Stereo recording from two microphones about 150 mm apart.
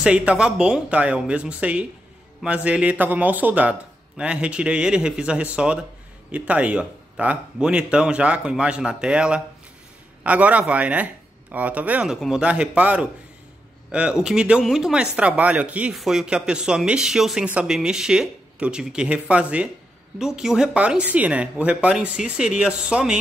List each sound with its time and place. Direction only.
0.0 s a man's voice: 5° right (ahead or behind)